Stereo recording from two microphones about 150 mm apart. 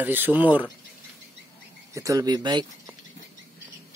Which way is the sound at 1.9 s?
20° right (ahead or behind).